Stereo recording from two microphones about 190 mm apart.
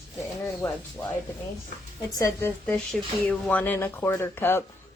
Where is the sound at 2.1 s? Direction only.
15° left (ahead or behind).